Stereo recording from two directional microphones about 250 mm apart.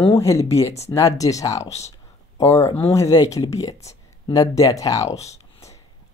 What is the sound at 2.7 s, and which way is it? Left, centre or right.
Speech, left.